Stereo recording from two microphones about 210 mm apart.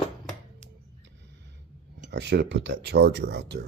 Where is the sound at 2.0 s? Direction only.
55° right (ahead or behind).